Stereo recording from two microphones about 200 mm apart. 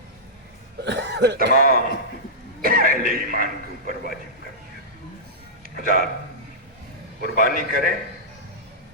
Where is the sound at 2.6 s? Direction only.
45° right (ahead or behind).